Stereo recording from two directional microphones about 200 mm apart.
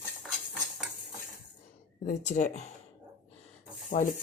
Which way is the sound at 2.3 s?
35° left (ahead or behind).